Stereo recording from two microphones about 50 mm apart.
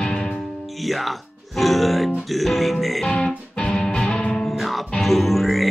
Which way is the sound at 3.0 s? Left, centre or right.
Centre.